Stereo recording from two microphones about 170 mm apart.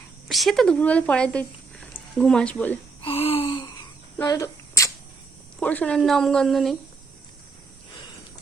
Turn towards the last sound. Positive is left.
turn(degrees=0)  # may be behind; listen again after turning